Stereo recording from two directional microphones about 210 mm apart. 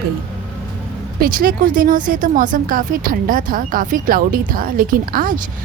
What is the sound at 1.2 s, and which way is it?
Speech, 45° right (ahead or behind).